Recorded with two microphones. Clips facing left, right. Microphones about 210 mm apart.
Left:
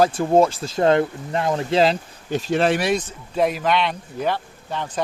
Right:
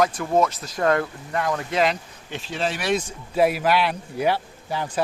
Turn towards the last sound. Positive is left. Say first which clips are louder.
# right 1 dB
turn(degrees=-10)  # may be behind; listen again after turning